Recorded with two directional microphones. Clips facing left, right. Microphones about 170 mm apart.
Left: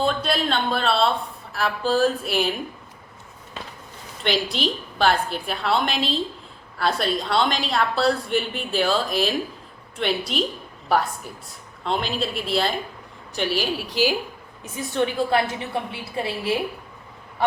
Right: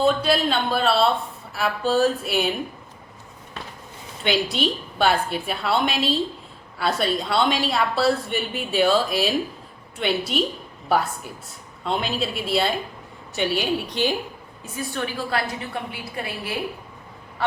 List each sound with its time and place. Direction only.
0.0 s a woman's voice: centre (ahead or behind)
4.2 s a woman's voice: centre (ahead or behind)
14.8 s a woman's voice: 25° left (ahead or behind)